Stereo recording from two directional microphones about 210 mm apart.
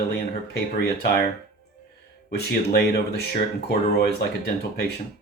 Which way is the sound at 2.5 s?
50° left (ahead or behind).